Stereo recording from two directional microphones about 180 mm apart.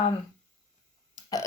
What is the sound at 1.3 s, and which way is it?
Speech, 20° left (ahead or behind).